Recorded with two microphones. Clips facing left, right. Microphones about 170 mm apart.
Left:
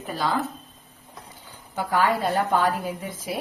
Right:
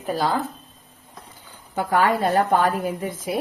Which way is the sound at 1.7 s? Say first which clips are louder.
Right 3 dB; 55° right (ahead or behind).